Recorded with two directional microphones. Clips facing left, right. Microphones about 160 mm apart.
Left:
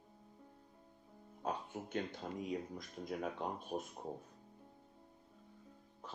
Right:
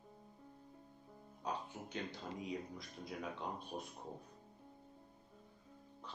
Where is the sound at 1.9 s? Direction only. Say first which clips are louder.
Left 4 dB; 50° left (ahead or behind).